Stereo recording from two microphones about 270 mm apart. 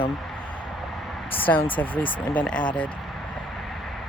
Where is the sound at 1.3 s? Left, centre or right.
Centre.